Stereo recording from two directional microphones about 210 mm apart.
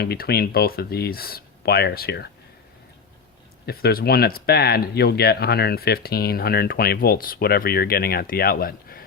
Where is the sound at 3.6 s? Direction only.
45° left (ahead or behind).